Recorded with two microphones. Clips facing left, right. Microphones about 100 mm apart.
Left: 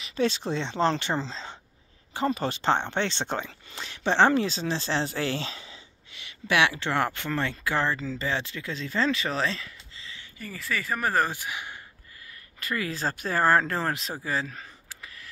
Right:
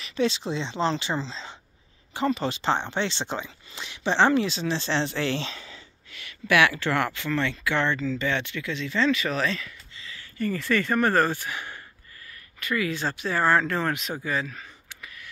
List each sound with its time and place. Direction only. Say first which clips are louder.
0.1 s speech: right 1 dB; 45° left (ahead or behind)
5.5 s a sound: right 1 dB; 25° left (ahead or behind)
7.1 s speech: right 2 dB; 40° left (ahead or behind)
10.3 s speech: right 8 dB; 5° left (ahead or behind)
12.5 s speech: right 4 dB; 35° left (ahead or behind)
14.2 s a sound: left 1 dB; 35° left (ahead or behind)